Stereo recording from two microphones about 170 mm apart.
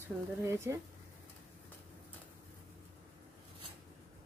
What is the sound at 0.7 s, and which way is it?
Speech, 15° right (ahead or behind).